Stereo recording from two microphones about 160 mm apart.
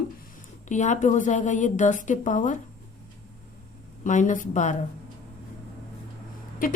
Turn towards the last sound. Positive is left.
turn(degrees=60)  # may be behind; listen again after turning